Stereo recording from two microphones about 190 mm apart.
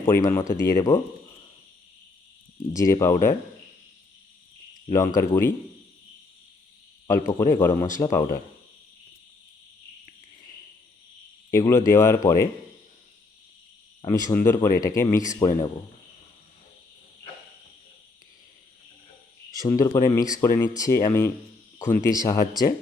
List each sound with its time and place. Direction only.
0.1 s speech: 15° left (ahead or behind)
2.7 s speech: 15° left (ahead or behind)
4.9 s speech: 20° left (ahead or behind)
7.1 s speech: 15° left (ahead or behind)
11.5 s speech: 15° left (ahead or behind)
14.3 s speech: 15° left (ahead or behind)
19.5 s speech: 20° left (ahead or behind)